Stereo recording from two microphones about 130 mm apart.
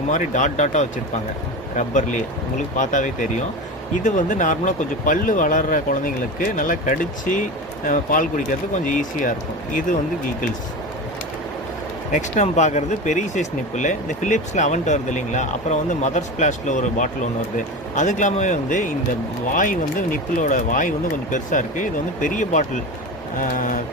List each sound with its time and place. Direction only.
0.1 s speech: 70° left (ahead or behind); by 9.3 s 90° left
12.1 s speech: 65° left (ahead or behind)
23.4 s speech: 90° left